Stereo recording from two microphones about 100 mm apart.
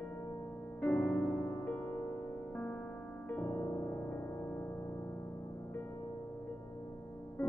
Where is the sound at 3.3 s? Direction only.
20° left (ahead or behind).